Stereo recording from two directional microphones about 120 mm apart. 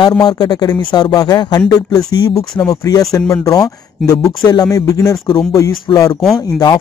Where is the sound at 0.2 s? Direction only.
35° left (ahead or behind).